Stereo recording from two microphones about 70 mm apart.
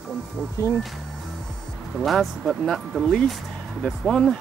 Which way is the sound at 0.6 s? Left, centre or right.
Left.